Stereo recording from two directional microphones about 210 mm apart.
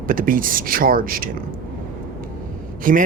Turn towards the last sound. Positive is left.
turn(degrees=-40)  # may be behind; listen again after turning